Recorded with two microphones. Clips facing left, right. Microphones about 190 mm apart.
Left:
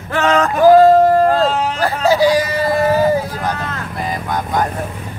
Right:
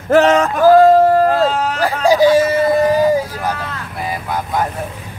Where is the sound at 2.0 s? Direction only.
20° right (ahead or behind).